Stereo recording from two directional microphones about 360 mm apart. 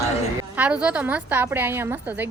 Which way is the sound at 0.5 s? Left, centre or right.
Centre.